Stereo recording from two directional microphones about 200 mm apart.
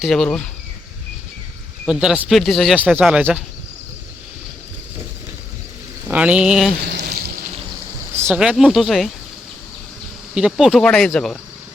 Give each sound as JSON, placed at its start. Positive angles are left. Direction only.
{"t": 0.0, "sound": "speech", "side_deg": 0}
{"t": 1.9, "sound": "speech", "side_deg": -5}
{"t": 6.1, "sound": "speech", "side_deg": -5}
{"t": 6.8, "sound": "a sound", "side_deg": -55}
{"t": 8.1, "sound": "speech", "side_deg": -10}
{"t": 10.3, "sound": "speech", "side_deg": -5}